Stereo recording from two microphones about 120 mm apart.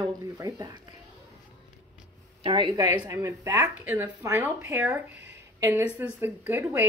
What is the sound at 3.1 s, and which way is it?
A woman's voice, 25° right (ahead or behind).